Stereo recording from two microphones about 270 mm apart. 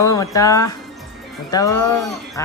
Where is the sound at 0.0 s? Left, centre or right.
Centre.